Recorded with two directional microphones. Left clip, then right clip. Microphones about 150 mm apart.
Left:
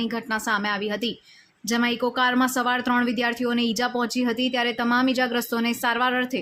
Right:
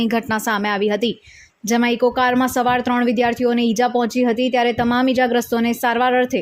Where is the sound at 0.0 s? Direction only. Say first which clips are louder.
Right 7 dB; 45° right (ahead or behind).